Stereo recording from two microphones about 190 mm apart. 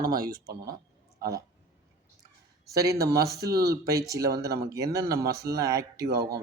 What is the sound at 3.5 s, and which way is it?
Speech, 55° right (ahead or behind).